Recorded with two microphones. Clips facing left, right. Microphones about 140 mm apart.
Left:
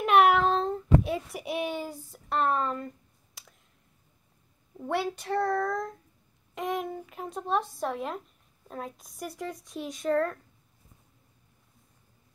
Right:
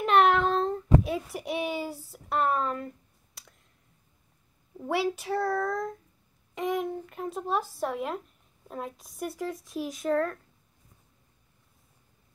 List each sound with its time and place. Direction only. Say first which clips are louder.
0.0 s child singing: left 1 dB; 5° left (ahead or behind)
2.1 s speech: even; 5° right (ahead or behind)
3.3 s clicking: even; centre (ahead or behind)
4.7 s speech: right 2 dB; 5° right (ahead or behind)